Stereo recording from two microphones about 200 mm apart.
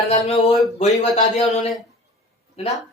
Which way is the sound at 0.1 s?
30° left (ahead or behind).